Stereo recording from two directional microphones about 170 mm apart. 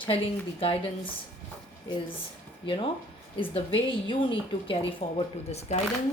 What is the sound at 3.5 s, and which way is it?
A woman's voice, 30° left (ahead or behind).